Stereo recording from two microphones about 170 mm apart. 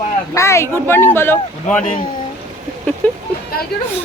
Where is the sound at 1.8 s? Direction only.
55° left (ahead or behind).